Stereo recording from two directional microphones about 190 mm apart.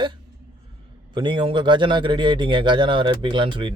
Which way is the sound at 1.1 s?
25° right (ahead or behind).